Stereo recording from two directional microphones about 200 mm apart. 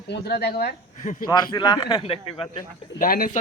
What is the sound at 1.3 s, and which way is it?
A man's voice, 20° left (ahead or behind).